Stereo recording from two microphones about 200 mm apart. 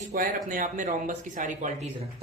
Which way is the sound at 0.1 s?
45° right (ahead or behind).